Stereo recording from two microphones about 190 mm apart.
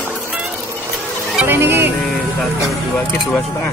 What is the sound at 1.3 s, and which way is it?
Speech, 10° right (ahead or behind).